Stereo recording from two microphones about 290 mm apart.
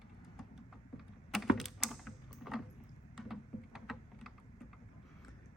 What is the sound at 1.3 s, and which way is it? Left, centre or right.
Typing, centre.